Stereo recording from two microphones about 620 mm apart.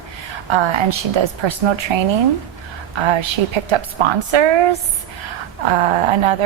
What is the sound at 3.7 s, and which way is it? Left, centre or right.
Speech, right.